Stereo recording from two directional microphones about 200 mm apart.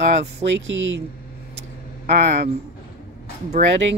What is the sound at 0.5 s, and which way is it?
Speech, 70° right (ahead or behind).